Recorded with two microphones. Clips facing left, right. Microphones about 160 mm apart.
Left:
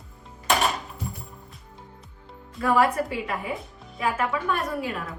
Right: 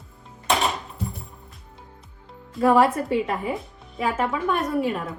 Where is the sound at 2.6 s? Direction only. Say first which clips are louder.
Right 4 dB; 40° right (ahead or behind).